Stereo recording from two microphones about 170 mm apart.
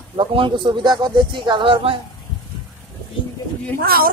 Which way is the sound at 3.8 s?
60° right (ahead or behind).